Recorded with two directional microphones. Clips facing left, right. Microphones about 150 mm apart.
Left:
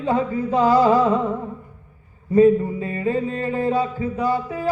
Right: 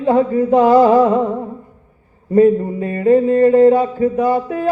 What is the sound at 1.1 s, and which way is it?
Music, 20° right (ahead or behind).